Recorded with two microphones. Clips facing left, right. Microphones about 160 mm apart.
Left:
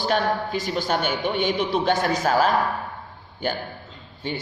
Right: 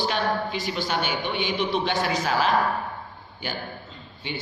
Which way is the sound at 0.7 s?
50° left (ahead or behind).